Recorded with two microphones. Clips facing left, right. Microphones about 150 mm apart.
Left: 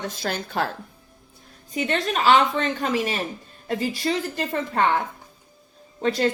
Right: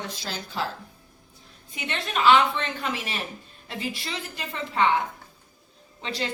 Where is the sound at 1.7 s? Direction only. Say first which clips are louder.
Left 6 dB; 40° left (ahead or behind).